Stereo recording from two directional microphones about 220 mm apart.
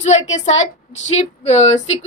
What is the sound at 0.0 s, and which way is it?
A woman's voice, 30° left (ahead or behind).